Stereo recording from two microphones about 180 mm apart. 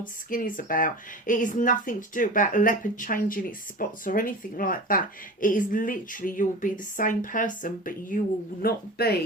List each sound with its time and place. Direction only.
0.3 s speech: 50° left (ahead or behind)
8.6 s speech: 60° left (ahead or behind)